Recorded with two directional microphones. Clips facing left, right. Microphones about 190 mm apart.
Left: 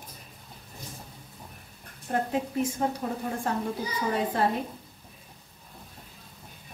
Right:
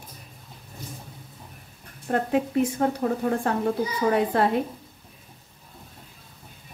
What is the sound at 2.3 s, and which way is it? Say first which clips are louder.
Speech: right 5 dB; 65° right (ahead or behind).